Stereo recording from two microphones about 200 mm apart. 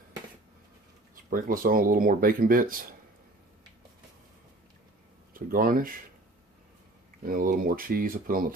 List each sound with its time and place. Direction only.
1.1 s speech: 45° right (ahead or behind)
5.3 s speech: 45° right (ahead or behind)
7.2 s speech: 45° right (ahead or behind)